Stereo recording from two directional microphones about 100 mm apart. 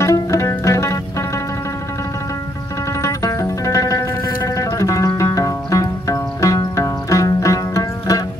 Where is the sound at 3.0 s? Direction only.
35° left (ahead or behind).